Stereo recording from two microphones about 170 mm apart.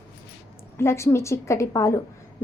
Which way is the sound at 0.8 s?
15° left (ahead or behind).